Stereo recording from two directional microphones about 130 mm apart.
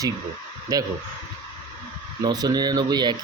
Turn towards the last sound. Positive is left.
turn(degrees=-35)  # may be behind; listen again after turning